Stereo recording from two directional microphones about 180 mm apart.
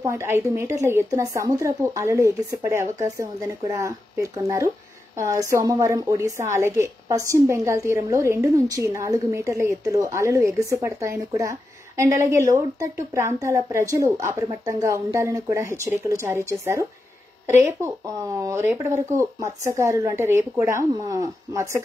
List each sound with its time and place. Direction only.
0.0 s a woman's voice: 15° right (ahead or behind)